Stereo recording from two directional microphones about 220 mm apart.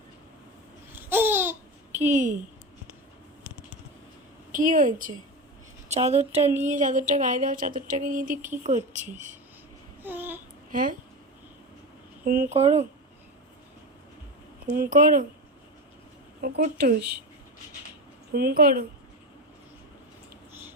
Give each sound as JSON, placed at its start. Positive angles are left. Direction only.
{"t": 0.9, "sound": "babbling", "side_deg": -10}
{"t": 2.0, "sound": "speech", "side_deg": -35}
{"t": 4.5, "sound": "speech", "side_deg": -35}
{"t": 10.0, "sound": "babbling", "side_deg": -10}
{"t": 10.7, "sound": "speech", "side_deg": -40}
{"t": 12.2, "sound": "speech", "side_deg": -40}
{"t": 14.7, "sound": "speech", "side_deg": -40}
{"t": 16.6, "sound": "speech", "side_deg": -45}
{"t": 18.3, "sound": "speech", "side_deg": -45}